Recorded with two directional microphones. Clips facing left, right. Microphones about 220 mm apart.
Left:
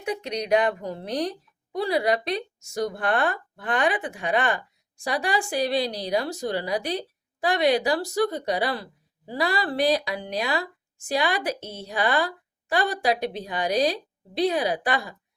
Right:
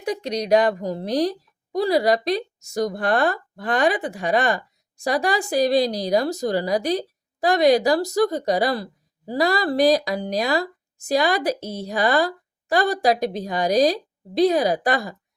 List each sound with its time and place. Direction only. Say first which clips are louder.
0.0 s a woman's voice: right 4 dB; 35° right (ahead or behind)